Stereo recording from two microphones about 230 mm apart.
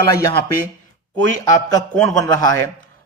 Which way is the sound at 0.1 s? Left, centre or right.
Centre.